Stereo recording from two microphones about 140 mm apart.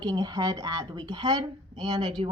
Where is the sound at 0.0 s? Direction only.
30° right (ahead or behind).